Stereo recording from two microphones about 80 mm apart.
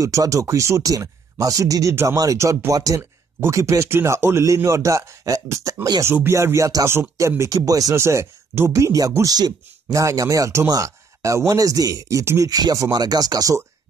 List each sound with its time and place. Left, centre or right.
0.0 s speech: right
3.0 s a sound: right
3.5 s speech: right
6.0 s speech: right
7.5 s speech: right
7.9 s speech: right
12.4 s speech: right